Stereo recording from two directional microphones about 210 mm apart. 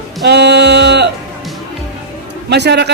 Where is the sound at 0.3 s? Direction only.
55° right (ahead or behind).